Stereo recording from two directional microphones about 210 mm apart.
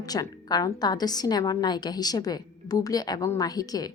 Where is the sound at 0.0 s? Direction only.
15° left (ahead or behind).